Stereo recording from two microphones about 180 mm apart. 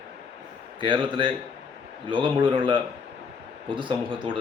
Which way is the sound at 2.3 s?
30° right (ahead or behind).